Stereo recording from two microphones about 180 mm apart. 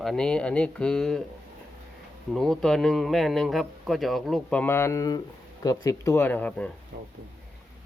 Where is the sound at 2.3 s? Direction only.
Centre (ahead or behind).